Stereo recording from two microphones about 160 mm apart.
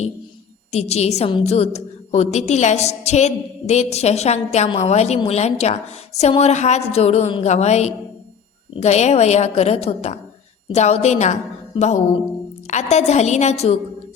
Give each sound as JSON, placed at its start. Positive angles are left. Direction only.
{"t": 0.7, "sound": "a woman's voice", "side_deg": 40}
{"t": 12.6, "sound": "a woman's voice", "side_deg": 45}